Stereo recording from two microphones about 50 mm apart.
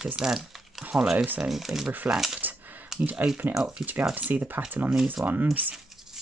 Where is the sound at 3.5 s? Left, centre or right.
Centre.